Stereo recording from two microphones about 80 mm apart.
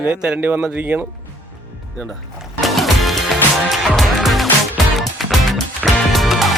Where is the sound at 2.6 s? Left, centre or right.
Centre.